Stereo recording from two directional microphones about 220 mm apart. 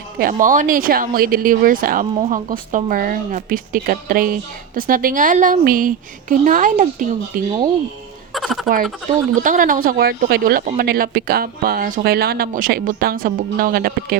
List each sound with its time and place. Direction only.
0.2 s speech: 40° right (ahead or behind)
8.3 s a sound: centre (ahead or behind)
9.4 s speech: 40° right (ahead or behind)